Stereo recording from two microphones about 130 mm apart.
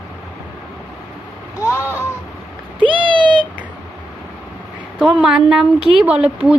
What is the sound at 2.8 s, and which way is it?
Cat, 40° right (ahead or behind).